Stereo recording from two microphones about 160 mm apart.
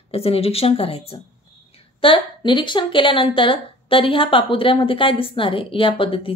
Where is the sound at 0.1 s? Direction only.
35° left (ahead or behind).